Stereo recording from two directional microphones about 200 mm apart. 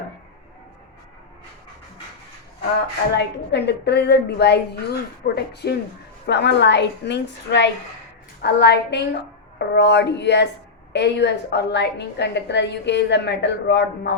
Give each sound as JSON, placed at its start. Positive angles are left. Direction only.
{"t": 3.2, "sound": "a woman's voice", "side_deg": 55}